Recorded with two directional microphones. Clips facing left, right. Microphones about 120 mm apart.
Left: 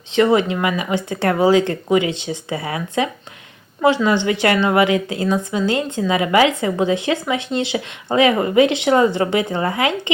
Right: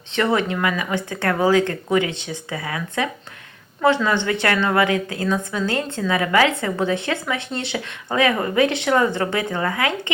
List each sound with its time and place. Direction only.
0.1 s a woman's voice: 20° left (ahead or behind)